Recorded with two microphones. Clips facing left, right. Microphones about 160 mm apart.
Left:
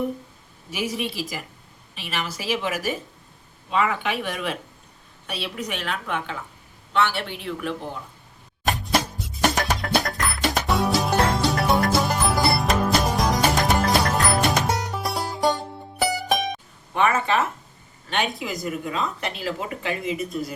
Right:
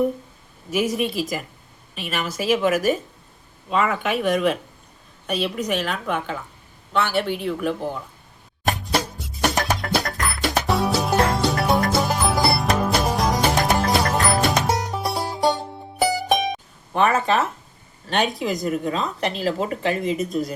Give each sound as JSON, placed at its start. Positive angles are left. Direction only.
{"t": 0.7, "sound": "a woman's voice", "side_deg": -50}
{"t": 8.6, "sound": "music", "side_deg": 0}
{"t": 16.9, "sound": "speech", "side_deg": -35}